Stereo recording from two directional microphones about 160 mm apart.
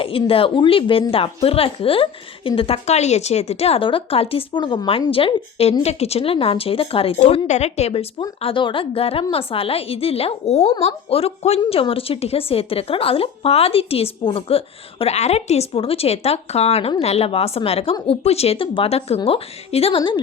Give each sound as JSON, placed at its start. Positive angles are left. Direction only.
{"t": 0.0, "sound": "a woman's voice", "side_deg": 35}